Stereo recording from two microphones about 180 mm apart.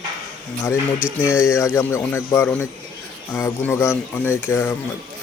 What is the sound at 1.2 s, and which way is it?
Speech, 15° left (ahead or behind).